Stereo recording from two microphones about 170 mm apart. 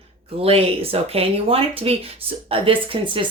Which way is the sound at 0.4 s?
35° right (ahead or behind).